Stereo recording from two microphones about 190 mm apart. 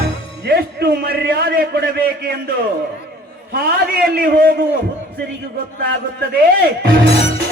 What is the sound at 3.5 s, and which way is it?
A man's voice, 55° right (ahead or behind).